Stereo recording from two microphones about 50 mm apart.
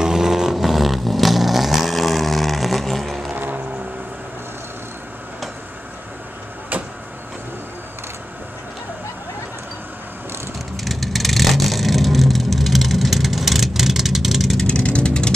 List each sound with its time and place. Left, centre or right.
0.0 s vehicle: centre
3.3 s vehicle: right
6.7 s vehicle: right
10.8 s vehicle: centre
14.7 s vehicle: left